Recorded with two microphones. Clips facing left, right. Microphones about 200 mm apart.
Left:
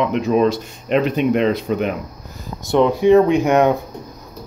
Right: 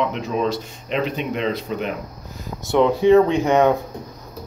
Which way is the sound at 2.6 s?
15° left (ahead or behind).